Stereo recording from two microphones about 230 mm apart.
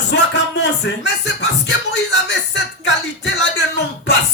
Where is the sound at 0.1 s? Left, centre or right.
Left.